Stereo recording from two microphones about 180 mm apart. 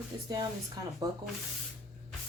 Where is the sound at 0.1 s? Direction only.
20° right (ahead or behind).